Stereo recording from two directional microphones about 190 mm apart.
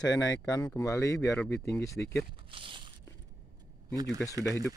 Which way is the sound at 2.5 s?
25° right (ahead or behind).